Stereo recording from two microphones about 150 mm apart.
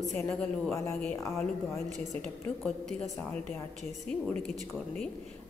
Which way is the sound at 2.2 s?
5° left (ahead or behind).